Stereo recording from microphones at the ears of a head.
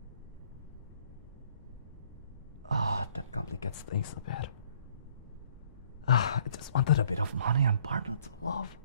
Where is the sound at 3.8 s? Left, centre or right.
Left.